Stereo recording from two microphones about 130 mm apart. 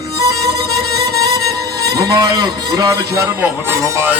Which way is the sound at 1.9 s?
30° right (ahead or behind).